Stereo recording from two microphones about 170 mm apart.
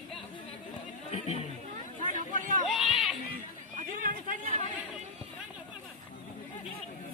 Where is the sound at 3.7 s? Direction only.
50° right (ahead or behind).